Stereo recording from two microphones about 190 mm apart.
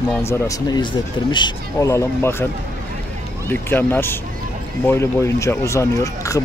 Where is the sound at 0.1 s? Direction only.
15° left (ahead or behind).